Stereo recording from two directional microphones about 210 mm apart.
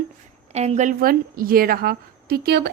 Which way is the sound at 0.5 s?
30° right (ahead or behind).